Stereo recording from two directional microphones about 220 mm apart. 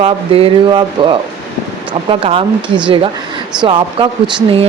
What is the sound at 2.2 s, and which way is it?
Speech, 25° right (ahead or behind).